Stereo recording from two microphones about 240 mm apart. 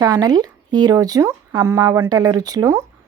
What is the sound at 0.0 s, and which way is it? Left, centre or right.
Speech, centre.